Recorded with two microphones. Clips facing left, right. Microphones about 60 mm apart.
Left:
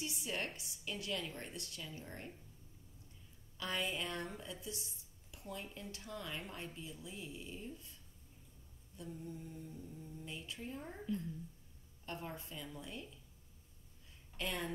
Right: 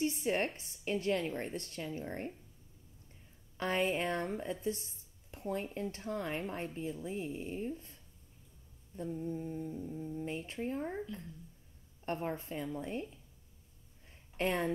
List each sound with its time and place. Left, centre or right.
0.0 s a woman's voice: right
3.5 s speech: right
12.1 s speech: right
14.3 s speech: right